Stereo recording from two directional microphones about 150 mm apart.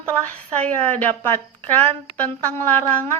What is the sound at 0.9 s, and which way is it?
Speech, 10° left (ahead or behind).